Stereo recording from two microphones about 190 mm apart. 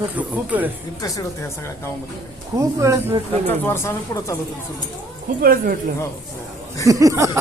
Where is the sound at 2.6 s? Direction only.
15° right (ahead or behind).